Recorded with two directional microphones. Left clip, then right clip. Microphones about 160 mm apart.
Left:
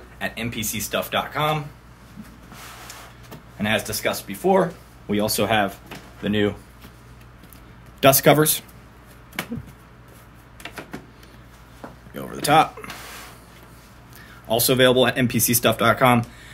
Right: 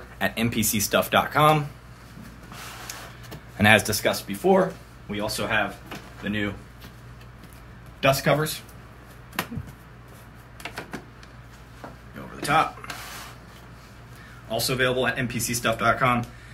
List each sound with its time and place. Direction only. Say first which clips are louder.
0.2 s speech: right 2 dB; 30° right (ahead or behind)
3.6 s speech: right 6 dB; 90° right
4.0 s speech: even; centre (ahead or behind)
5.0 s speech: left 6 dB; 90° left
6.2 s speech: left 7 dB; 55° left (ahead or behind)
8.0 s speech: left 6 dB; 90° left
10.6 s a sound: even; centre (ahead or behind)
12.2 s a sound: left 5 dB; 90° left
14.5 s speech: left 7 dB; 65° left (ahead or behind)